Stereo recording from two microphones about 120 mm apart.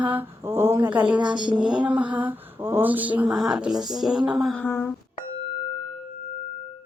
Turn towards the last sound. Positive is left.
turn(degrees=45)  # may be behind; listen again after turning